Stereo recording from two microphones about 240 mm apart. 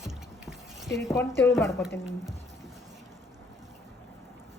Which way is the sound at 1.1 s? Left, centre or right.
Centre.